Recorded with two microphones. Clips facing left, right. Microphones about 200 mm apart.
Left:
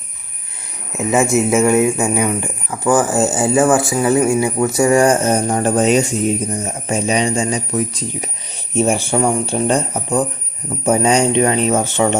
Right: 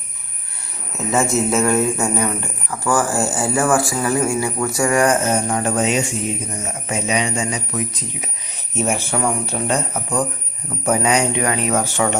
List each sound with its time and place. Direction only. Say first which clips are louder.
0.9 s speech: left 4 dB; 15° left (ahead or behind)
10.8 s speech: left 4 dB; 30° left (ahead or behind)